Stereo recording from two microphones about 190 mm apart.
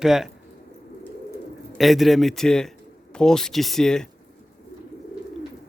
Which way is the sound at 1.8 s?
Centre (ahead or behind).